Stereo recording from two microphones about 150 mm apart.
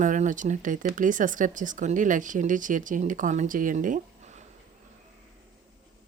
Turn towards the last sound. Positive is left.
turn(degrees=-60)  # may be behind; listen again after turning